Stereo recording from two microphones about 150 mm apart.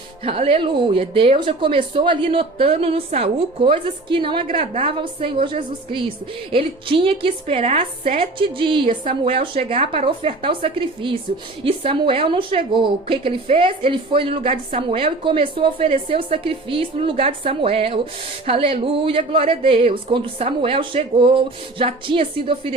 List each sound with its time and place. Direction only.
0.3 s a woman's voice: 40° right (ahead or behind)
4.5 s a woman's voice: 50° right (ahead or behind)
4.9 s a woman's voice: 35° right (ahead or behind)